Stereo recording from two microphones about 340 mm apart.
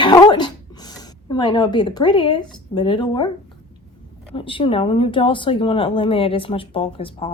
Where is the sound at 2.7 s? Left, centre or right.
Centre.